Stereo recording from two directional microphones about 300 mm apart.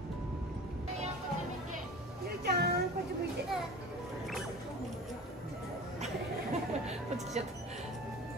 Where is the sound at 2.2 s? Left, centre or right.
Right.